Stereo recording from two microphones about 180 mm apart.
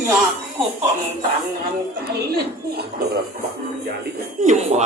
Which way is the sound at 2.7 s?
60° right (ahead or behind).